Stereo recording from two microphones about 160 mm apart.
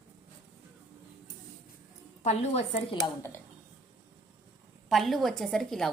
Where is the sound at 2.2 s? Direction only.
45° left (ahead or behind).